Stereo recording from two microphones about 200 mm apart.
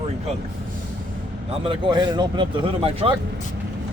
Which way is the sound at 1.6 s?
25° right (ahead or behind).